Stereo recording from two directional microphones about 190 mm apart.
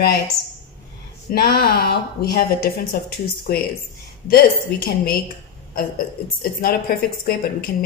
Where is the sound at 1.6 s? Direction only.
55° left (ahead or behind).